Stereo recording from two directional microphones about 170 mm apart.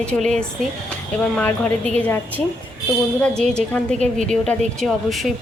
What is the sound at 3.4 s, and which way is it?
A woman's voice, 5° left (ahead or behind).